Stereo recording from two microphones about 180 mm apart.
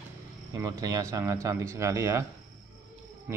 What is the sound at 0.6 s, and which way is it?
Speech, 20° right (ahead or behind).